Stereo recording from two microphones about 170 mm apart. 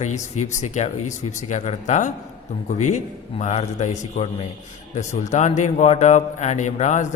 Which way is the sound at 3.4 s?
45° left (ahead or behind).